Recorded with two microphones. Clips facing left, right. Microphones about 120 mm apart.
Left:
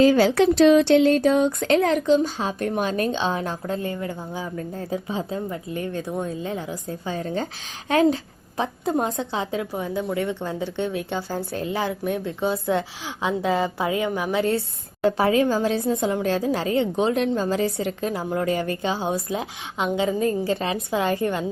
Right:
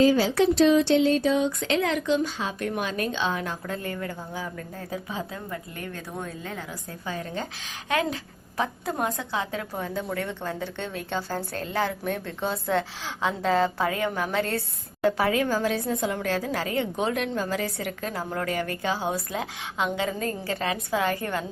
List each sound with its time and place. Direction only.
0.0 s a woman's voice: 65° left (ahead or behind); by 14.6 s 15° left (ahead or behind)
15.2 s a woman's voice: 25° left (ahead or behind)